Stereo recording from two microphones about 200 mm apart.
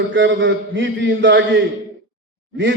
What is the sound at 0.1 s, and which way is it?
A man's voice, 70° right (ahead or behind).